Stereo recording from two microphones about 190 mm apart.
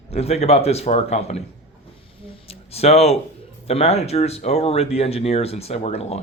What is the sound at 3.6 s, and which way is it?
Speech, 35° left (ahead or behind).